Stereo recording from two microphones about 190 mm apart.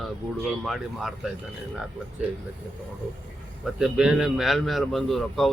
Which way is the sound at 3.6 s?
5° right (ahead or behind).